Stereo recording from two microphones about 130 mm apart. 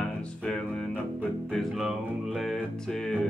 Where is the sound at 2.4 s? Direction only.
Centre (ahead or behind).